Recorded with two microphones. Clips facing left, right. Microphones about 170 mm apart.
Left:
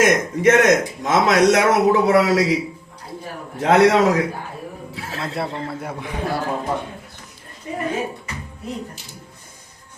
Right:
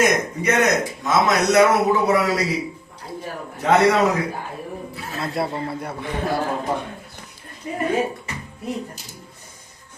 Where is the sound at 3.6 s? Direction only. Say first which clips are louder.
Left 2 dB; 90° left.